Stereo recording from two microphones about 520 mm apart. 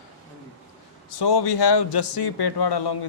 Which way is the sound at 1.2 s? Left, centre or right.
Left.